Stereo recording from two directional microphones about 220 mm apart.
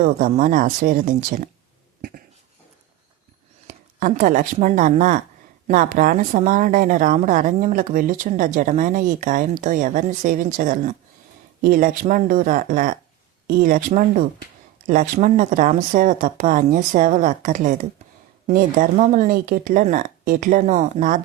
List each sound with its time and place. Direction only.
0.0 s speech: 35° right (ahead or behind)
3.7 s speech: 35° right (ahead or behind)